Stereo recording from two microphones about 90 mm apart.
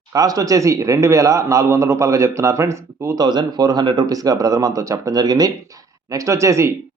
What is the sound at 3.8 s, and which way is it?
Speech, 60° right (ahead or behind).